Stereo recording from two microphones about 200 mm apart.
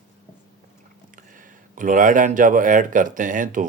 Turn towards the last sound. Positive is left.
turn(degrees=-40)  # may be behind; listen again after turning